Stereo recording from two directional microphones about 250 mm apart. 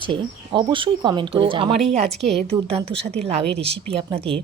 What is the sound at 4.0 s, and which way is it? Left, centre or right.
Speech, right.